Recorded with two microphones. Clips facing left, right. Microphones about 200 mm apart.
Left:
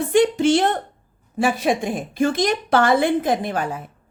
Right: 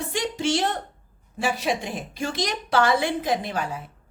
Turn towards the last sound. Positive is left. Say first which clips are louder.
# left 4 dB
turn(degrees=50)  # may be behind; listen again after turning